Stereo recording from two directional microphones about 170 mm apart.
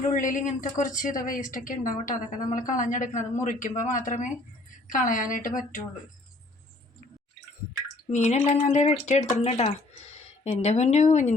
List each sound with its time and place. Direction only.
0.1 s a woman's voice: 50° left (ahead or behind)
8.1 s speech: 40° left (ahead or behind)